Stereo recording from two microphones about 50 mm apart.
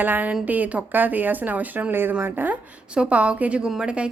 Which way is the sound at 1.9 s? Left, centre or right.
Right.